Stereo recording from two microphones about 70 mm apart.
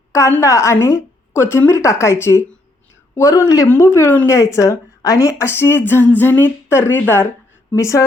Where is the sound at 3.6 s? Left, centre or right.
Left.